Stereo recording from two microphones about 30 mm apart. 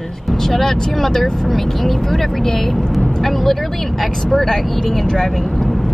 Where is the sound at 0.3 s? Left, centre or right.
Centre.